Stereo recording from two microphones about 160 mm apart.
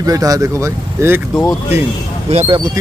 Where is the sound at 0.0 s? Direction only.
20° right (ahead or behind).